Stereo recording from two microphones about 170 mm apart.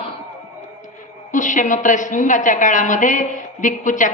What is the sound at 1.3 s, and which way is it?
A man's voice, 50° left (ahead or behind).